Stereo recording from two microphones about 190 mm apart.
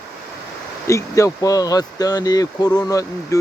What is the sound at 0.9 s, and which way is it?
Speech, 15° left (ahead or behind).